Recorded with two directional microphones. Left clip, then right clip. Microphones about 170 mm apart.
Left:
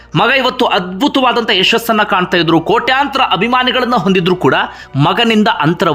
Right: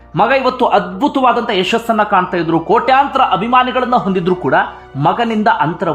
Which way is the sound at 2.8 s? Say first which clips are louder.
Right 1 dB; 5° left (ahead or behind).